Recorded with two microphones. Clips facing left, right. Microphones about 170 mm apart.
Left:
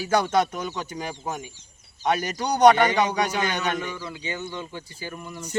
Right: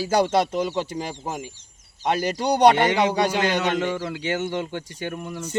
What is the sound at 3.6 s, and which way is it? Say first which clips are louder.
Speech: right 5 dB; 85° right.